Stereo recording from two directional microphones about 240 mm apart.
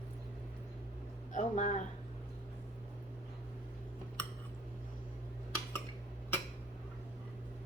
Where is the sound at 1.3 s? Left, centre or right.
Left.